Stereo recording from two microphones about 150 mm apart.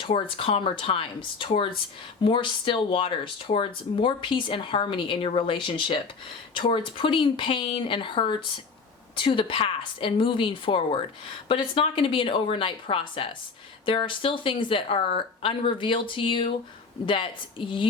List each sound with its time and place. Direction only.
0.0 s speech: 35° left (ahead or behind)